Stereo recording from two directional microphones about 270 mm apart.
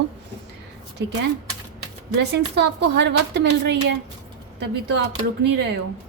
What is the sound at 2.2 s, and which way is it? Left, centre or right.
A woman's voice, right.